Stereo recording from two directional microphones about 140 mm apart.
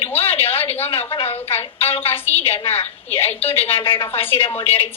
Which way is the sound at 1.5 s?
15° left (ahead or behind).